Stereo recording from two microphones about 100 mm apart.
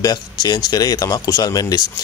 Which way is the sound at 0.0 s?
40° left (ahead or behind).